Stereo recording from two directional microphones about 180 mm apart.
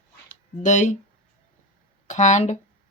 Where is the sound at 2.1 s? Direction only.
40° left (ahead or behind).